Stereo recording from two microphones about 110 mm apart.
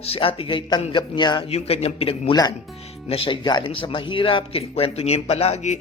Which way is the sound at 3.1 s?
45° left (ahead or behind).